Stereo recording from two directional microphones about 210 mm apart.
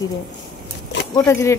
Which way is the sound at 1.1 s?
15° left (ahead or behind).